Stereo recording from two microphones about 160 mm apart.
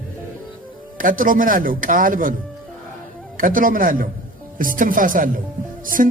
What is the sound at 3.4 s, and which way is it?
Speech, 60° right (ahead or behind).